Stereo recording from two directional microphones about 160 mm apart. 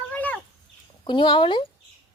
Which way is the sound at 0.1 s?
10° left (ahead or behind).